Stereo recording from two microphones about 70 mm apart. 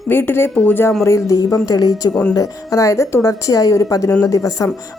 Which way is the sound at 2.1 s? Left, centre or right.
Left.